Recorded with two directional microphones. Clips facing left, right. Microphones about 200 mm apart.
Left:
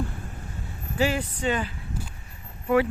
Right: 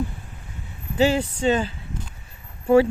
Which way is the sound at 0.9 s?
25° right (ahead or behind).